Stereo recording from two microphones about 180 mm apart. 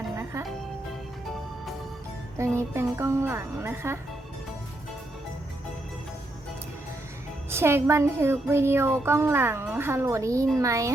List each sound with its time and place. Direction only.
2.4 s music: 15° right (ahead or behind)
7.5 s music: 15° right (ahead or behind)